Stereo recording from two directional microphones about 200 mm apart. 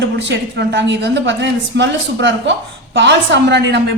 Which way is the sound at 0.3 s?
60° right (ahead or behind).